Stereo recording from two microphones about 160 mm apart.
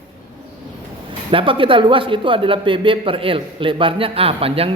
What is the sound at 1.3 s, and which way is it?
Speech, 35° right (ahead or behind).